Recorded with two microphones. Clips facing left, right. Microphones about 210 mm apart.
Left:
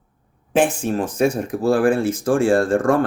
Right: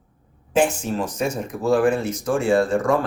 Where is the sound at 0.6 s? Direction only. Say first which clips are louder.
Left 3 dB; 55° left (ahead or behind).